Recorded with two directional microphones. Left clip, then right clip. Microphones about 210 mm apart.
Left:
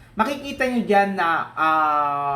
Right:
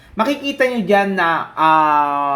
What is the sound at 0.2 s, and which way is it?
Speech, 40° right (ahead or behind).